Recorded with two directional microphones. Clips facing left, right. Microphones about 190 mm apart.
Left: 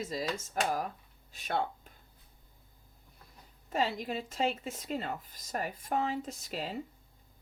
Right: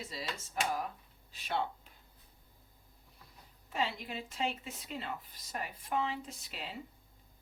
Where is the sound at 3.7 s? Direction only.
40° left (ahead or behind).